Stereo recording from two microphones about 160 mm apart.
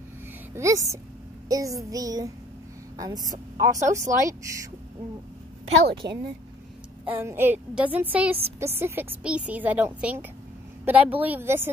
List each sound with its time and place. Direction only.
0.6 s child singing: 20° right (ahead or behind)
6.0 s child singing: 20° right (ahead or behind)
7.1 s a woman's voice: 15° right (ahead or behind)